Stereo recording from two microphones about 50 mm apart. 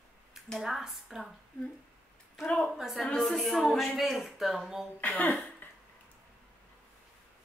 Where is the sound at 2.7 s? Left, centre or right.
Centre.